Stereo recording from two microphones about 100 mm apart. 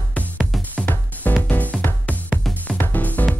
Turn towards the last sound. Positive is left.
turn(degrees=15)  # may be behind; listen again after turning